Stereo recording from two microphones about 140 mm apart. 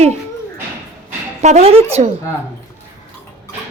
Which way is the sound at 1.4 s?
50° right (ahead or behind).